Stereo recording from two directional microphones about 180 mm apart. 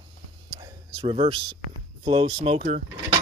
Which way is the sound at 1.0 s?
30° right (ahead or behind).